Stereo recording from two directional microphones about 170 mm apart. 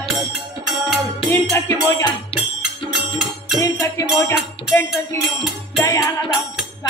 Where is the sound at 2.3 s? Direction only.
30° left (ahead or behind).